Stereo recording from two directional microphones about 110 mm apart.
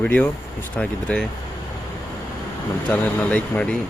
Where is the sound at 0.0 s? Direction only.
15° left (ahead or behind).